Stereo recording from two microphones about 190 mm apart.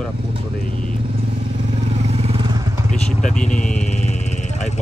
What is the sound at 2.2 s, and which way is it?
Vehicle, 30° right (ahead or behind).